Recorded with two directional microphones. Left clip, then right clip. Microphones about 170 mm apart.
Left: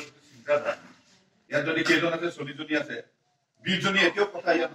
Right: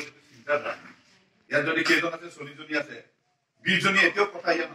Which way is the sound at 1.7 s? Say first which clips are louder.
Left 2 dB; 20° left (ahead or behind).